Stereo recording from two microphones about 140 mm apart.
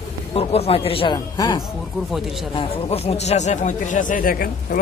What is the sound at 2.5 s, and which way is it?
Speech, 40° left (ahead or behind).